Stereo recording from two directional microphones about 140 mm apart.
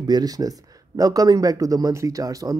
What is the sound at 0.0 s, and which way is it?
Speech, 30° right (ahead or behind).